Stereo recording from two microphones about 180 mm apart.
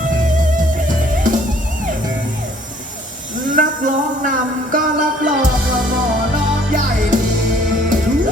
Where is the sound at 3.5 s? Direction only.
45° right (ahead or behind).